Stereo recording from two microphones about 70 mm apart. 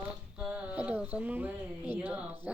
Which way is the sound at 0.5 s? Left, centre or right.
Right.